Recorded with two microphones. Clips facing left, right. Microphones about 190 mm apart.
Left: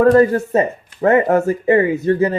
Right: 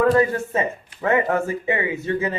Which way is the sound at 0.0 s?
40° left (ahead or behind).